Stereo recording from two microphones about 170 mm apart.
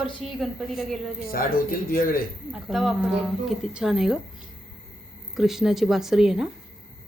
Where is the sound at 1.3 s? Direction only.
60° left (ahead or behind).